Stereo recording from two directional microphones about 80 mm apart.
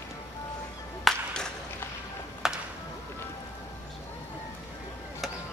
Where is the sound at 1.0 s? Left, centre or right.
Centre.